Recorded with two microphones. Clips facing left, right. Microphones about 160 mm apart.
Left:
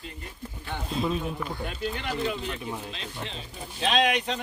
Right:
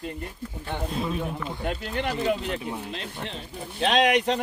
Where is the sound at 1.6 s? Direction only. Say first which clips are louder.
Right 7 dB; 60° right (ahead or behind).